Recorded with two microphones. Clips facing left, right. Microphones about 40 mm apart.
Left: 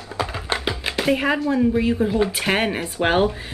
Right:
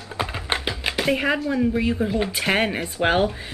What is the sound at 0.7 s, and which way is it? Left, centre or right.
Speech, centre.